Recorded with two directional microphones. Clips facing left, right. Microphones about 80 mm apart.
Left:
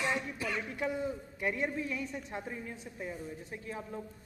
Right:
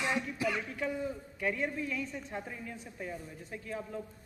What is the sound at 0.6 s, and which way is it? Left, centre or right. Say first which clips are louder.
A woman's voice: left 1 dB; centre.